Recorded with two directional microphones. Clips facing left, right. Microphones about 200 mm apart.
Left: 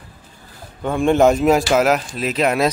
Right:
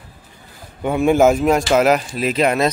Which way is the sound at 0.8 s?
5° right (ahead or behind).